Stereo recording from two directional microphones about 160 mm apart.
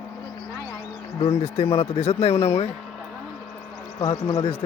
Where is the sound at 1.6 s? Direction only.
40° left (ahead or behind).